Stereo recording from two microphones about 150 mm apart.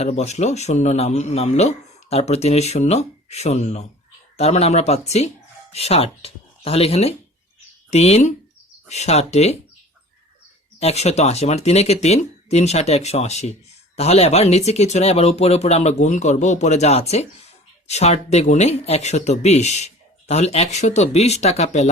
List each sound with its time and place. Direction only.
0.0 s speech: 50° left (ahead or behind)
10.8 s speech: 45° left (ahead or behind)